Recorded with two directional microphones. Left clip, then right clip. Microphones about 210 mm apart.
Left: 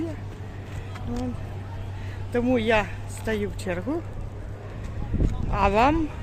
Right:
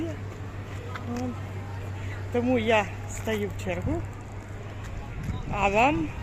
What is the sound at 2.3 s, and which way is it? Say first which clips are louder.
Speech: left 1 dB; 10° left (ahead or behind).